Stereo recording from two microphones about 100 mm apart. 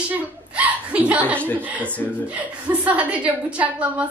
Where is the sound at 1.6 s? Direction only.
20° right (ahead or behind).